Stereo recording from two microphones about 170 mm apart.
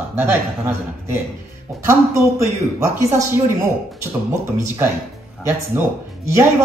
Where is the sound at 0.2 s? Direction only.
15° right (ahead or behind).